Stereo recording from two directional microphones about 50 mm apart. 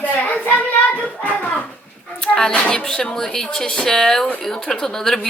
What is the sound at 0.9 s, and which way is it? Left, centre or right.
Speech, left.